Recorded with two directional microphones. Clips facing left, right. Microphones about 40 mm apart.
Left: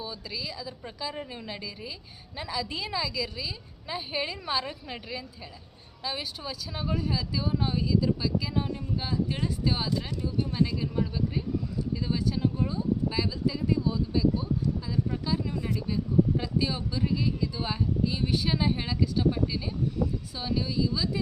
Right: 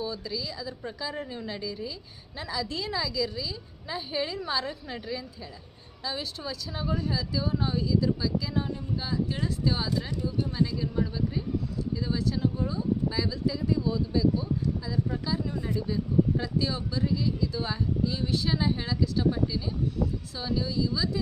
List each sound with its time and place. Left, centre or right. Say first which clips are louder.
0.0 s a woman's voice: right 3 dB; centre
11.9 s a woman's voice: even; left
20.4 s speech: even; centre